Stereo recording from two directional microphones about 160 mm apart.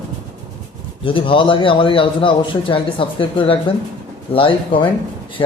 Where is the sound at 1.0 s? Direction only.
35° left (ahead or behind).